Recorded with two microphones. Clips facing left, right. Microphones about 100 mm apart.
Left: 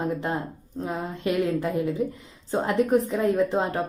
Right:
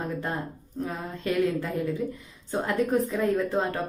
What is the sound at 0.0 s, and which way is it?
A woman's voice, 20° left (ahead or behind).